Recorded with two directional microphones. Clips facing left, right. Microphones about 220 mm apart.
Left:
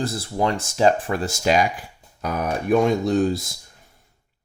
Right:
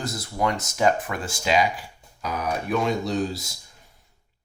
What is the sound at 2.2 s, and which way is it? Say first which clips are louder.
Speech: left 3 dB; 50° left (ahead or behind).